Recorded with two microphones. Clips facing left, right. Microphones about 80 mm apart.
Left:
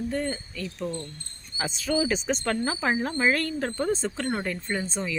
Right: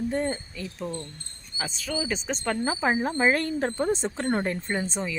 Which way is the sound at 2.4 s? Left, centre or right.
Centre.